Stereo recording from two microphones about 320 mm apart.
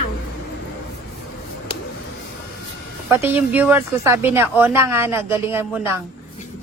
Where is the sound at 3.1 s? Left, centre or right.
Centre.